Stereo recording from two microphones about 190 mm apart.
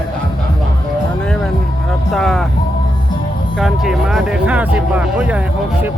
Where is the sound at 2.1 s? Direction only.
Centre (ahead or behind).